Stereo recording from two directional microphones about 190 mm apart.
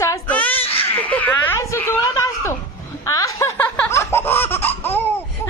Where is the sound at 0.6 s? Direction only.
30° left (ahead or behind).